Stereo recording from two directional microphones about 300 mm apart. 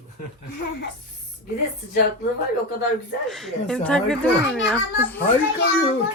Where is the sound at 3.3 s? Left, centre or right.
Centre.